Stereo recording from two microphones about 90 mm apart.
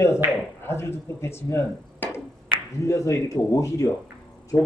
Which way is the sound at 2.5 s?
75° right (ahead or behind).